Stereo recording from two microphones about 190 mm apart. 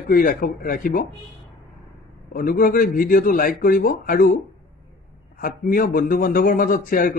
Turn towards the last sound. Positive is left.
turn(degrees=45)  # may be behind; listen again after turning